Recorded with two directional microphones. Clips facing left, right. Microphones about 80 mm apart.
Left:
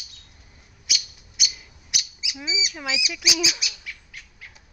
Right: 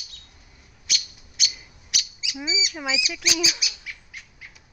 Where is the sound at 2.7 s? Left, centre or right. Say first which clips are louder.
Right 2 dB; centre.